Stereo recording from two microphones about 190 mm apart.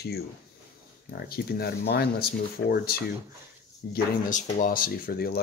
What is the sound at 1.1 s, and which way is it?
Speech, 55° left (ahead or behind).